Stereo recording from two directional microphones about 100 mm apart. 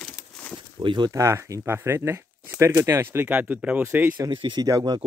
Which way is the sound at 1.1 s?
30° right (ahead or behind).